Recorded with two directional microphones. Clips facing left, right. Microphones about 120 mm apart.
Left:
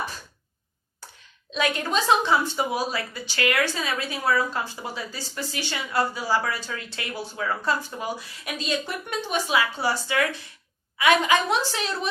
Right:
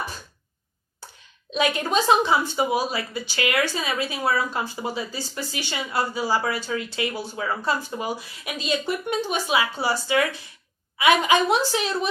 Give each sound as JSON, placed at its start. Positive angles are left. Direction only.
{"t": 1.5, "sound": "speech", "side_deg": -10}